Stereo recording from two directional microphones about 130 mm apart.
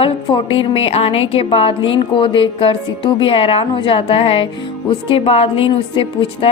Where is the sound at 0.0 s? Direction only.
40° left (ahead or behind).